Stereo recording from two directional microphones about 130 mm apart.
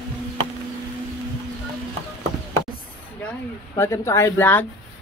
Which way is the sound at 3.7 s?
20° left (ahead or behind).